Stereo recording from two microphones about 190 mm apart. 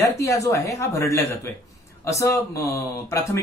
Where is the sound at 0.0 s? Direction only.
15° left (ahead or behind).